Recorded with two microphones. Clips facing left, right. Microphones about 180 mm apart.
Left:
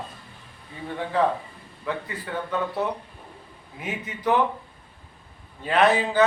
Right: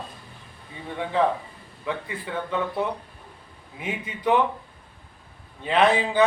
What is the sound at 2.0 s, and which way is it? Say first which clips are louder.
Speech: even; 10° right (ahead or behind).